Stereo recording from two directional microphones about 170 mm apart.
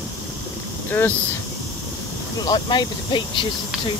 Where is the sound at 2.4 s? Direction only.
25° left (ahead or behind).